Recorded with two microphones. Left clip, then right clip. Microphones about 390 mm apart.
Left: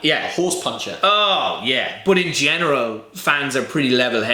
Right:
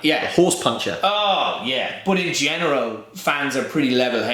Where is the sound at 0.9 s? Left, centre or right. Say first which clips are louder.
Left 5 dB; left.